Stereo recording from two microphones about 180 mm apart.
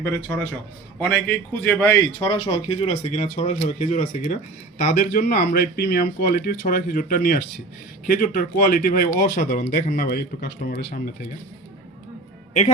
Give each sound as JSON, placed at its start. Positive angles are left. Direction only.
{"t": 0.0, "sound": "a man's voice", "side_deg": 10}
{"t": 4.8, "sound": "speech", "side_deg": 55}